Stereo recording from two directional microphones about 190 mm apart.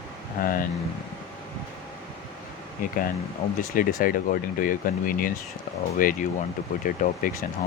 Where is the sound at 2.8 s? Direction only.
45° left (ahead or behind).